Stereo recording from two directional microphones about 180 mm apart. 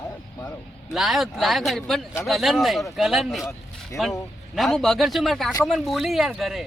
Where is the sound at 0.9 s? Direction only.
Centre (ahead or behind).